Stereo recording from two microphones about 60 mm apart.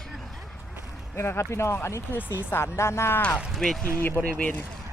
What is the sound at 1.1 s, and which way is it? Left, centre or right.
Speech, left.